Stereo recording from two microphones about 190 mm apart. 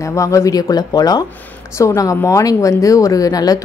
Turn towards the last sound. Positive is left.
turn(degrees=20)  # may be behind; listen again after turning